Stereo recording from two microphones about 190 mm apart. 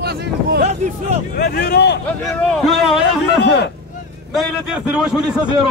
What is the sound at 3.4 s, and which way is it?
Speech, 60° left (ahead or behind).